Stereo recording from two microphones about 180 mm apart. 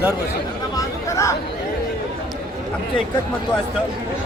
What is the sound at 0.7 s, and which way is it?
Chatter, 15° left (ahead or behind).